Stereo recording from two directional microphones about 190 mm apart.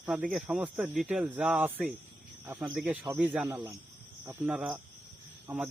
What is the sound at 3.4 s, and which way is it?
Speech, 15° right (ahead or behind).